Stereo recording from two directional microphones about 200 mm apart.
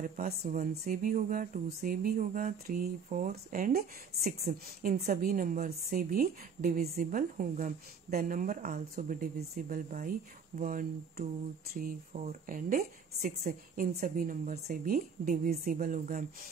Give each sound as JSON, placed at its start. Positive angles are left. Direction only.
{"t": 0.0, "sound": "speech", "side_deg": -40}